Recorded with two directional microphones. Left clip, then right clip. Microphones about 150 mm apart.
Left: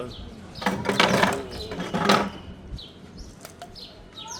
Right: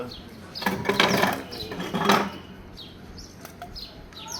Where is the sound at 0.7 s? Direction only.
5° left (ahead or behind).